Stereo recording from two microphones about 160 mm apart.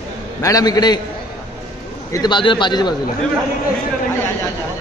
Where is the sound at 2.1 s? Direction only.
30° left (ahead or behind).